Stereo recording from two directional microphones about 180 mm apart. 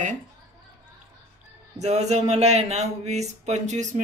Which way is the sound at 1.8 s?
40° right (ahead or behind).